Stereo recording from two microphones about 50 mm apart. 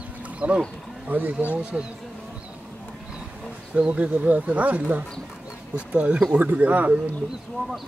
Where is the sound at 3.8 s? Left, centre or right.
Right.